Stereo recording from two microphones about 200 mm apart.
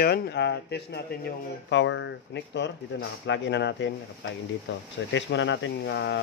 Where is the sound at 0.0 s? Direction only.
55° left (ahead or behind).